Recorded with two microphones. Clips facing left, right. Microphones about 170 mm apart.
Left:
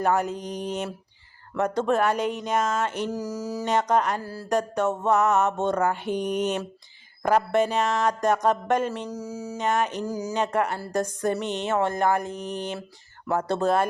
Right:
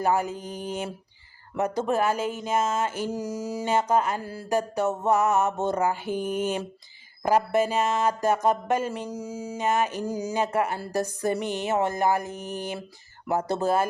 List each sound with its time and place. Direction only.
0.0 s speech: 5° right (ahead or behind)
1.5 s music: 10° right (ahead or behind)
1.9 s speech: 5° right (ahead or behind)
3.2 s a sound: 25° right (ahead or behind)
3.6 s speech: 5° right (ahead or behind)
4.2 s a sound: 20° right (ahead or behind)
4.4 s music: 5° right (ahead or behind)
5.0 s speech: 5° right (ahead or behind)
9.0 s a sound: 25° right (ahead or behind)
9.6 s speech: 5° right (ahead or behind)
10.1 s a sound: 25° right (ahead or behind)
10.3 s music: 5° right (ahead or behind)